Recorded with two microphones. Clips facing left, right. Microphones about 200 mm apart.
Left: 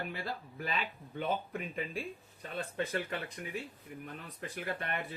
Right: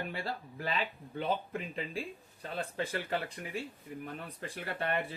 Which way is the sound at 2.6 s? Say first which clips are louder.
Left 1 dB; 30° right (ahead or behind).